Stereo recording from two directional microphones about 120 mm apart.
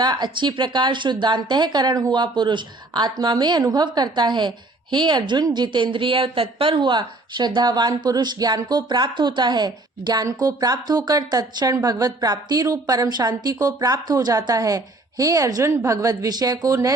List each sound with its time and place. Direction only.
0.0 s a woman's voice: 35° right (ahead or behind)